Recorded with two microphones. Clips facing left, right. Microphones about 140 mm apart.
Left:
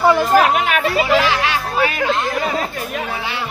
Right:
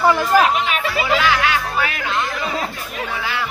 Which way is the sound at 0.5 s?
50° left (ahead or behind).